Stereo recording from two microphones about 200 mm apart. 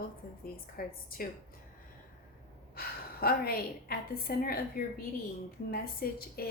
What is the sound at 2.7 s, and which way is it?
A woman's voice, 50° left (ahead or behind).